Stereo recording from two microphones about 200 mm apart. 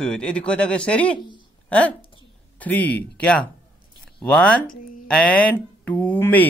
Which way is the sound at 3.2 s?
5° left (ahead or behind).